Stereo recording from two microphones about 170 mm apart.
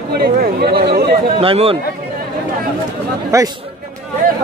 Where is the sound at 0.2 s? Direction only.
65° right (ahead or behind).